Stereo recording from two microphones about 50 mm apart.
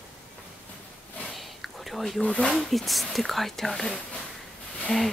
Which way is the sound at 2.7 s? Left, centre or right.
Centre.